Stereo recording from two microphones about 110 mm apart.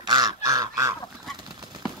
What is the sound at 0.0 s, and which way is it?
Goose, 35° right (ahead or behind).